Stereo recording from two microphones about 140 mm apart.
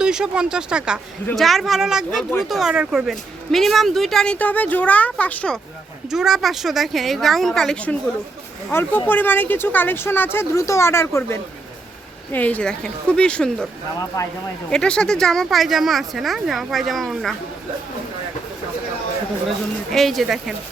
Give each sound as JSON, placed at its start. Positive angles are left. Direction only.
{"t": 0.0, "sound": "speech", "side_deg": -5}
{"t": 6.1, "sound": "speech", "side_deg": -5}
{"t": 14.1, "sound": "speech", "side_deg": 25}
{"t": 14.7, "sound": "speech", "side_deg": 5}
{"t": 19.9, "sound": "speech", "side_deg": 0}